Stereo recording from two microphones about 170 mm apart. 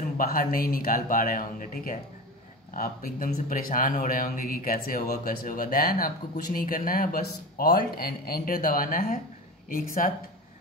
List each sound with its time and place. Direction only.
0.2 s speech: 55° left (ahead or behind)